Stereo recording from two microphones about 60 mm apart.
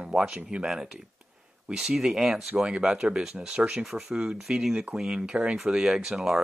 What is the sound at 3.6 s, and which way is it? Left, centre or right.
Speech, centre.